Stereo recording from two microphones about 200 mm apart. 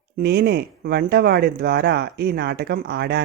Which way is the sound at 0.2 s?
55° right (ahead or behind).